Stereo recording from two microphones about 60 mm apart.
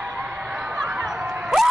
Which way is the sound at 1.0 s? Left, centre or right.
Centre.